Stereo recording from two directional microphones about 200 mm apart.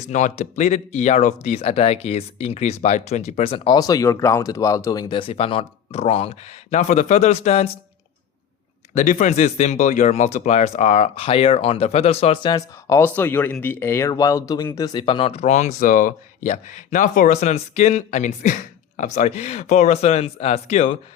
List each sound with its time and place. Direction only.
0.1 s speech: 40° left (ahead or behind)
9.0 s speech: 40° left (ahead or behind)